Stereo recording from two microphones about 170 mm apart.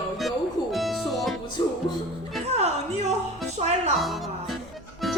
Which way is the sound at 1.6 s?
25° left (ahead or behind).